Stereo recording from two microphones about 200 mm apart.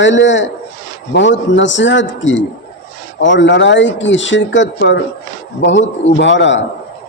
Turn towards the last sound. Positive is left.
turn(degrees=65)  # may be behind; listen again after turning